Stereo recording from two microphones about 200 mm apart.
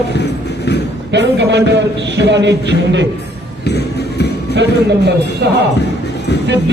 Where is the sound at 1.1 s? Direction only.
60° right (ahead or behind).